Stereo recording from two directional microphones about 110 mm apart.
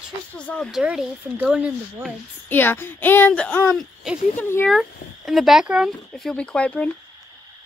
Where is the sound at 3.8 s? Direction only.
5° right (ahead or behind).